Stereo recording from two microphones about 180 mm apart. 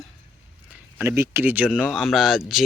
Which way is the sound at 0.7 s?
10° right (ahead or behind).